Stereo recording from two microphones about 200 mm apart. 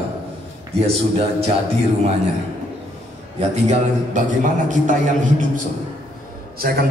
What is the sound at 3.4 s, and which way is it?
A man's voice, 35° right (ahead or behind).